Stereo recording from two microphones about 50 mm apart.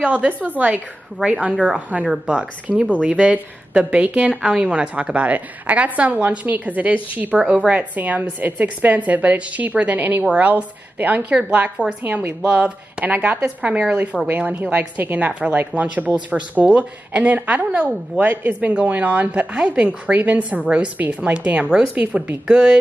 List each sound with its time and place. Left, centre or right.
0.0 s a woman's voice: right
1.5 s a woman's voice: centre; by 7.3 s right
7.3 s a woman's voice: right
13.6 s a woman's voice: right
14.2 s a woman's voice: right
18.5 s a woman's voice: right
22.5 s speech: centre